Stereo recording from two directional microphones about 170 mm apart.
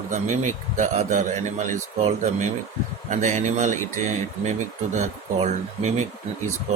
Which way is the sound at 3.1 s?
45° right (ahead or behind).